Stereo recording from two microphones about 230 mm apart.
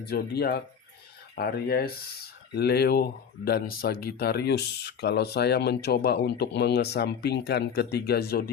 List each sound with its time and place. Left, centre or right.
0.0 s speech: left